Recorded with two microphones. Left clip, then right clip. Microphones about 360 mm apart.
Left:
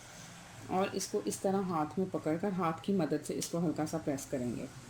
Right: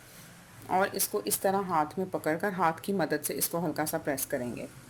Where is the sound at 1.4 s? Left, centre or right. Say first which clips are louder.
Right 8 dB; right.